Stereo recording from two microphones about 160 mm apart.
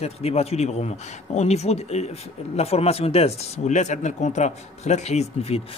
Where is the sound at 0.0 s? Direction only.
40° left (ahead or behind).